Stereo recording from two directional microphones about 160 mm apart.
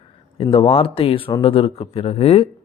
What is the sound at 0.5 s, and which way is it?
Speech, 35° left (ahead or behind).